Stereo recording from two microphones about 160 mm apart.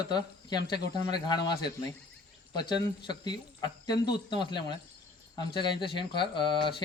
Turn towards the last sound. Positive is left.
turn(degrees=30)  # may be behind; listen again after turning